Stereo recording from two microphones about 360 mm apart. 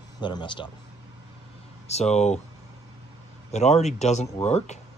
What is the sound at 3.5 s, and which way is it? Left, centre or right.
Speech, centre.